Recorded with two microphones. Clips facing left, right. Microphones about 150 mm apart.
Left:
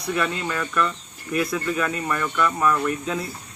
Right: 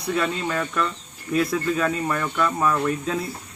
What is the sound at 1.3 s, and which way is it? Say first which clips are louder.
Speech: right 2 dB; 30° right (ahead or behind).